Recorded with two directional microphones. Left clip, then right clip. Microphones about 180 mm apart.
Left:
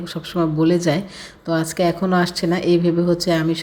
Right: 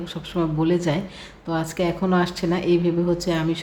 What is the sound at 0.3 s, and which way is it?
A woman's voice, 20° left (ahead or behind).